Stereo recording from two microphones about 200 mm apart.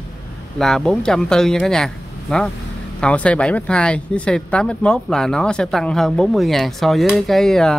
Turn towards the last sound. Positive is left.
turn(degrees=5)  # may be behind; listen again after turning